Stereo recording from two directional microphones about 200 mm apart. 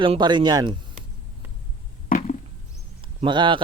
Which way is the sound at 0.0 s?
25° right (ahead or behind).